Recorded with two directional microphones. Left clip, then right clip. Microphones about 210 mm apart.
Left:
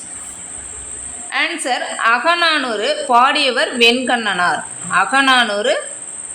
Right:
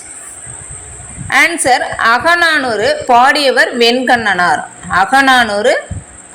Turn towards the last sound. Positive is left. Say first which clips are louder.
# right 4 dB
turn(degrees=-5)  # may be behind; listen again after turning